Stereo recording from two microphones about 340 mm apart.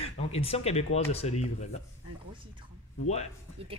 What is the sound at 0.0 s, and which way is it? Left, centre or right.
Speech, centre.